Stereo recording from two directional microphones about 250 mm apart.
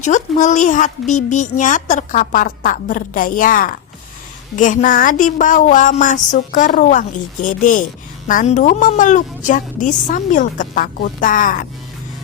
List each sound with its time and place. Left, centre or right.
0.0 s a woman's voice: left